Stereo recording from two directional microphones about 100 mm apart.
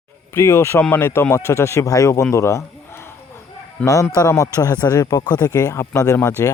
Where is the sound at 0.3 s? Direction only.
35° left (ahead or behind).